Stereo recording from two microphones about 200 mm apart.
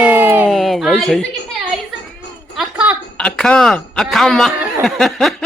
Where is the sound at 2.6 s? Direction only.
5° right (ahead or behind).